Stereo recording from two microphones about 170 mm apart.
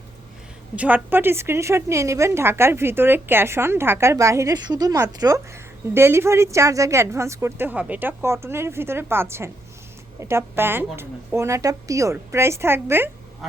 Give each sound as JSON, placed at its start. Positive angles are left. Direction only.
{"t": 0.8, "sound": "a woman's voice", "side_deg": -10}